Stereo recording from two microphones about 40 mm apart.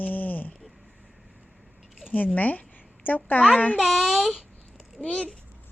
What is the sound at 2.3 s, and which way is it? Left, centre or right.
Speech, left.